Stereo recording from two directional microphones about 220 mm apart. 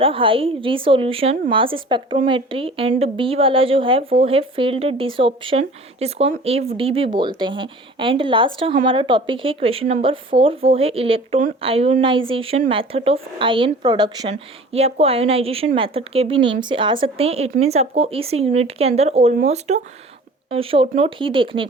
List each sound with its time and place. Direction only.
0.0 s a woman's voice: 25° right (ahead or behind)